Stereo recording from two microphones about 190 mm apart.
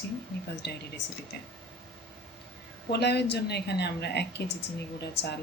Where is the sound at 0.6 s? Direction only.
60° left (ahead or behind).